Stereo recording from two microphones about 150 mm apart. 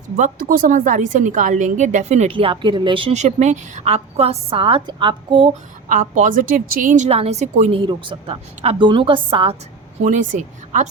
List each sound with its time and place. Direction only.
0.2 s speech: 65° right (ahead or behind); by 2.3 s 50° right (ahead or behind)
2.3 s a woman's voice: 35° right (ahead or behind)
5.9 s speech: 60° right (ahead or behind)
7.7 s a woman's voice: 35° right (ahead or behind)
10.0 s speech: 55° right (ahead or behind)